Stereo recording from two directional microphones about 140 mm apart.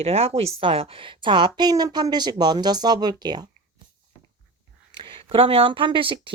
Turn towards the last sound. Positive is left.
turn(degrees=-35)  # may be behind; listen again after turning